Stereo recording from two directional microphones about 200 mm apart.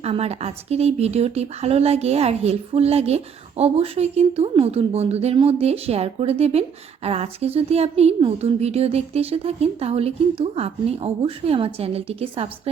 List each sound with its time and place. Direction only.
0.0 s a woman's voice: 30° right (ahead or behind)